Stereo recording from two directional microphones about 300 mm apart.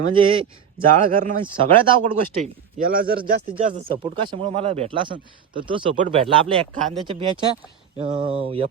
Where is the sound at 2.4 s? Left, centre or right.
Right.